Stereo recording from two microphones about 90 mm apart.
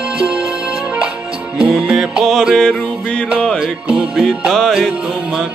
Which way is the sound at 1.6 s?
5° right (ahead or behind).